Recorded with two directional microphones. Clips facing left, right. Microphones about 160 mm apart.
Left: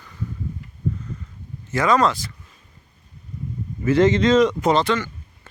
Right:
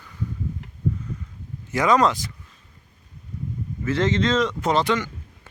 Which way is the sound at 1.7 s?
15° right (ahead or behind).